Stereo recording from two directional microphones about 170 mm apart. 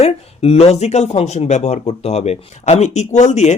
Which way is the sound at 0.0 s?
35° left (ahead or behind).